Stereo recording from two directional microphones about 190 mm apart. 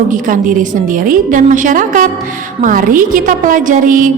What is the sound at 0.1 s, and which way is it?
A woman's voice, 45° right (ahead or behind).